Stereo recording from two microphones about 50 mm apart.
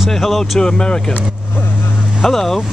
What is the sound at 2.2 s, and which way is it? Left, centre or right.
Speech, centre.